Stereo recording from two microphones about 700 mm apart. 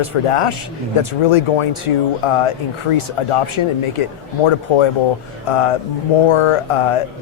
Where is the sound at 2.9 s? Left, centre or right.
Left.